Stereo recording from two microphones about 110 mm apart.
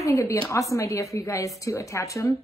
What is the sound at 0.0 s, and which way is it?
A woman's voice, 25° left (ahead or behind).